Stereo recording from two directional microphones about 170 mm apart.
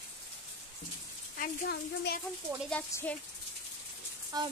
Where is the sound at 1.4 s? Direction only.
65° left (ahead or behind).